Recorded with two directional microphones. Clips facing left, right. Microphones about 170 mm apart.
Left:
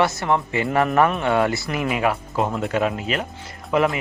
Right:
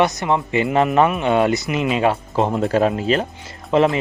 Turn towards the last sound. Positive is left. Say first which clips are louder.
# right 4 dB
turn(degrees=-25)  # may be behind; listen again after turning